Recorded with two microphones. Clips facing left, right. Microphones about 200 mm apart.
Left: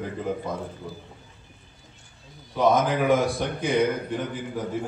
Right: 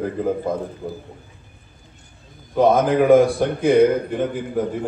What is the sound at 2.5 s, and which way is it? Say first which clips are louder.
A man's voice: right 5 dB; 55° right (ahead or behind).